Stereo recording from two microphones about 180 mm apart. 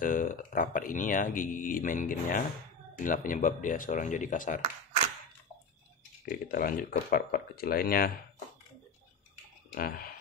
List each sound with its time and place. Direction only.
0.0 s speech: 50° left (ahead or behind)
6.2 s speech: 55° left (ahead or behind)
9.8 s speech: 55° left (ahead or behind)